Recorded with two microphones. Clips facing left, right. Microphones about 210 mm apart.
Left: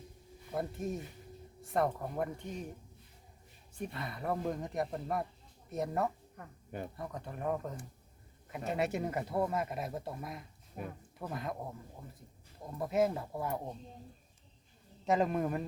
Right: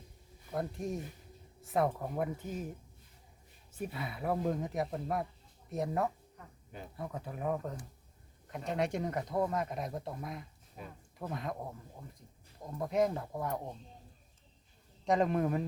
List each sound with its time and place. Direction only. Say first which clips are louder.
0.5 s speech: even; centre (ahead or behind)
3.8 s speech: right 1 dB; 5° right (ahead or behind)
6.3 s a sound: left 6 dB; 55° left (ahead or behind)
6.9 s speech: right 1 dB; centre (ahead or behind)
10.8 s speech: left 5 dB; 55° left (ahead or behind)
11.2 s speech: right 1 dB; centre (ahead or behind)
12.8 s speech: even; 5° left (ahead or behind)
15.0 s speech: right 1 dB; 5° left (ahead or behind)